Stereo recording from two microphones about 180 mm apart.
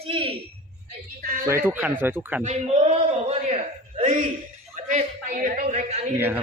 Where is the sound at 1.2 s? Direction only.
55° right (ahead or behind).